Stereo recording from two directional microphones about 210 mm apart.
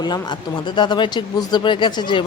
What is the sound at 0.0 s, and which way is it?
Speech, 20° left (ahead or behind).